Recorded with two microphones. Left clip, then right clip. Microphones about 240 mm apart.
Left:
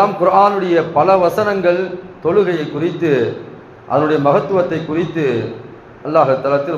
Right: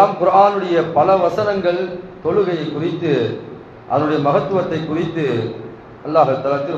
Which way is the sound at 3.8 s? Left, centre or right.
Left.